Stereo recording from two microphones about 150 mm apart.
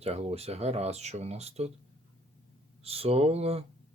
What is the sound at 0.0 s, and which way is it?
Speech, 45° right (ahead or behind).